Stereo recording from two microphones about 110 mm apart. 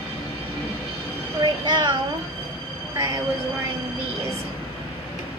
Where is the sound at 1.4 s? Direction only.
45° right (ahead or behind).